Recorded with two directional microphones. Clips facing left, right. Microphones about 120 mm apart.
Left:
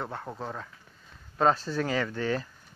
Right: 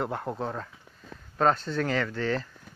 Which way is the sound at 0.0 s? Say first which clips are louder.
Right 5 dB; 10° right (ahead or behind).